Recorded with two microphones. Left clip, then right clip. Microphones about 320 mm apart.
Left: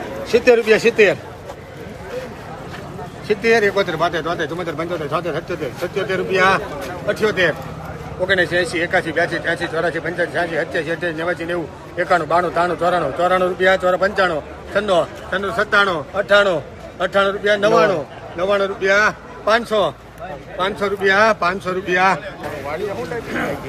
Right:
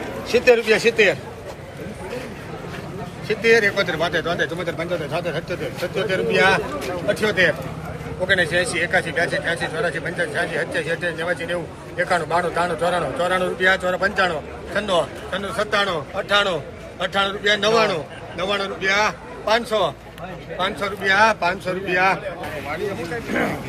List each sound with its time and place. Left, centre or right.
0.3 s speech: left
3.2 s speech: left